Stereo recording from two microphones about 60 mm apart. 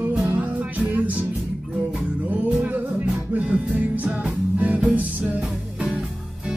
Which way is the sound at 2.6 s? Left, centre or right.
Right.